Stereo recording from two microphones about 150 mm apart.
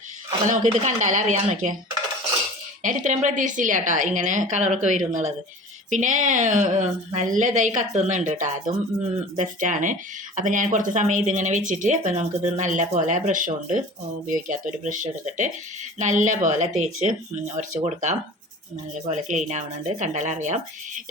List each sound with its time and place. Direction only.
0.4 s speech: 55° right (ahead or behind)
2.8 s speech: 55° right (ahead or behind)